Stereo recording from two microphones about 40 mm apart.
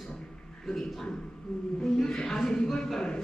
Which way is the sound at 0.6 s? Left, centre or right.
Centre.